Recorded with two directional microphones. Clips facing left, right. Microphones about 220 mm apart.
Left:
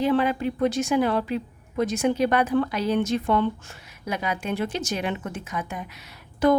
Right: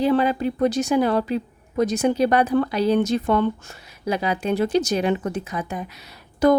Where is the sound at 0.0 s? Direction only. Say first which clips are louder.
Right 3 dB; 35° right (ahead or behind).